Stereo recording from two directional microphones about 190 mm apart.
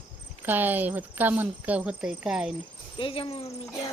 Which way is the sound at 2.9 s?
25° left (ahead or behind).